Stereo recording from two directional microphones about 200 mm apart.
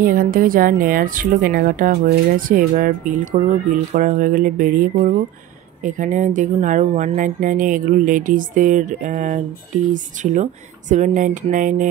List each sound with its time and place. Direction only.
0.0 s speech: 45° right (ahead or behind)
5.9 s speech: 40° right (ahead or behind)